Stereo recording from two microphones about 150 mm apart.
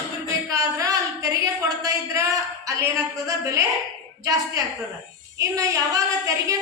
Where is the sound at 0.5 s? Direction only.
20° right (ahead or behind).